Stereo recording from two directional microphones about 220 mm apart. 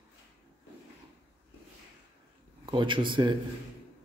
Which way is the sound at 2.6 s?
20° right (ahead or behind).